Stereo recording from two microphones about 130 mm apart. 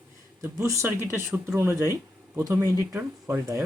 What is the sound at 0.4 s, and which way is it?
Speech, 20° right (ahead or behind).